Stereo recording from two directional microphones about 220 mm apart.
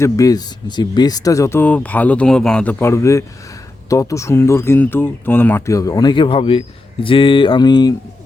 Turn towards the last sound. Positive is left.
turn(degrees=20)  # may be behind; listen again after turning